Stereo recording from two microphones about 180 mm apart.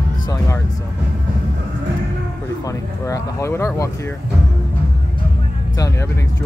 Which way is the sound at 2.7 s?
20° left (ahead or behind).